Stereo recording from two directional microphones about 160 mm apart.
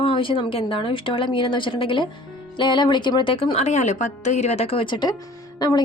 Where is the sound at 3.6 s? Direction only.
45° left (ahead or behind).